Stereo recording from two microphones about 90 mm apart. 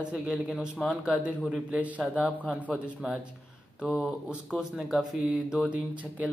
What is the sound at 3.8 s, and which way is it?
Speech, centre (ahead or behind).